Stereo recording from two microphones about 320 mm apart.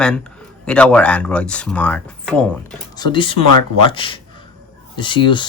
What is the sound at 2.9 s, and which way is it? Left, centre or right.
Speech, centre.